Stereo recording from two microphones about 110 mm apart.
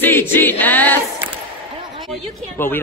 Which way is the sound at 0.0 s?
20° left (ahead or behind).